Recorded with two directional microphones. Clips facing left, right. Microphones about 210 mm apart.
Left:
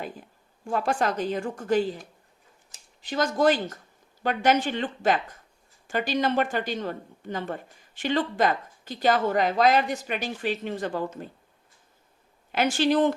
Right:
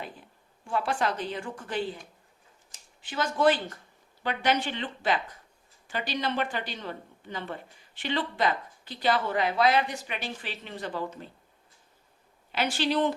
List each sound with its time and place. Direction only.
0.7 s a woman's voice: 45° left (ahead or behind)
3.0 s a woman's voice: 40° left (ahead or behind)
12.5 s a woman's voice: 45° left (ahead or behind)